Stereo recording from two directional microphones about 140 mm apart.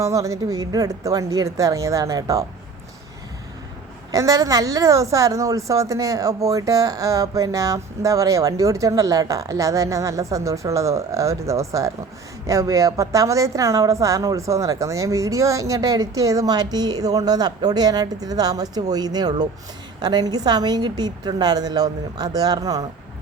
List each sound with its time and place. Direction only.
0.0 s a woman's voice: 25° right (ahead or behind)
4.1 s a woman's voice: 25° right (ahead or behind)